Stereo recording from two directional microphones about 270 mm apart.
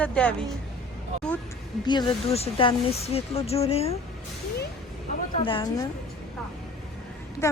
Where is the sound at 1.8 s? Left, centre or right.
Centre.